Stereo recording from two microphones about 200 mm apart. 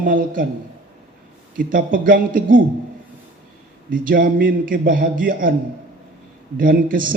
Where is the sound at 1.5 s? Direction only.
45° right (ahead or behind).